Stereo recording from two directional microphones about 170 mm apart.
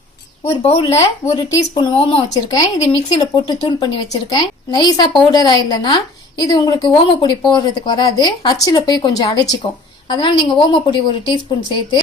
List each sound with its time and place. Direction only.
0.6 s speech: 35° left (ahead or behind)
2.5 s a woman's voice: 20° left (ahead or behind)